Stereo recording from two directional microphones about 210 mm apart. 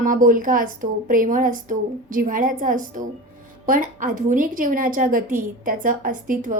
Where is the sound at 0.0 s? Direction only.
40° right (ahead or behind).